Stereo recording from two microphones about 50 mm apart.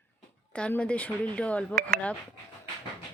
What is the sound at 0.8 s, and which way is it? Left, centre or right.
Speech, left.